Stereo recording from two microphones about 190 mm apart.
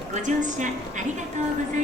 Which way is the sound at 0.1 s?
40° right (ahead or behind).